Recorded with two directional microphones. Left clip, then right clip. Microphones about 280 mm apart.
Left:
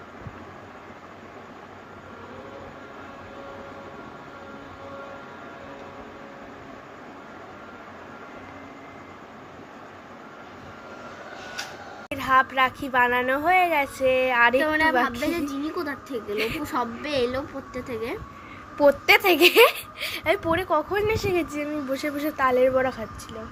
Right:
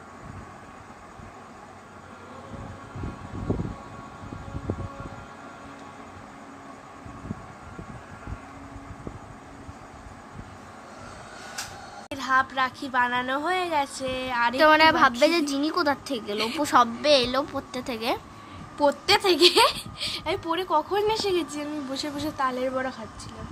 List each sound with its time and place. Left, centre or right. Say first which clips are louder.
12.1 s speech: left 3 dB; centre
14.6 s a woman's voice: right 4 dB; right
18.8 s speech: left 4 dB; centre